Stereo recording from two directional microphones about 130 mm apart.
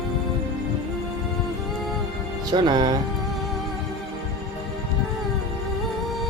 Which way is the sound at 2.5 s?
35° right (ahead or behind).